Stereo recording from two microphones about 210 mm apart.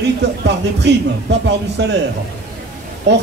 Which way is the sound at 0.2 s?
55° right (ahead or behind).